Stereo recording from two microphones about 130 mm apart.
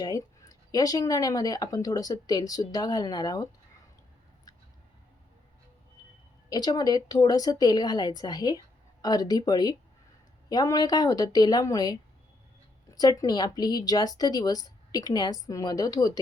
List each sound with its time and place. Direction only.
0.0 s speech: 30° left (ahead or behind)
6.5 s a woman's voice: 30° left (ahead or behind)